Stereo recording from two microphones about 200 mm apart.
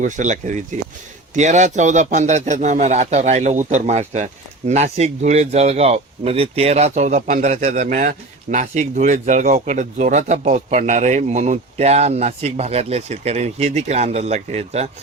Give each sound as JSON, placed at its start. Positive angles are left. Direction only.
{"t": 0.0, "sound": "speech", "side_deg": -40}